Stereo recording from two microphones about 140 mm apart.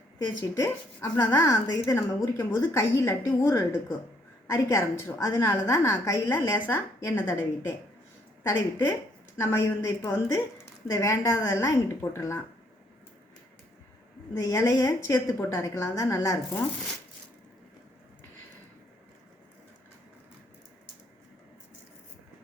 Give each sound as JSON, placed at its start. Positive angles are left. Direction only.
{"t": 0.5, "sound": "a woman's voice", "side_deg": 25}
{"t": 8.4, "sound": "a woman's voice", "side_deg": 25}
{"t": 14.3, "sound": "a woman's voice", "side_deg": 25}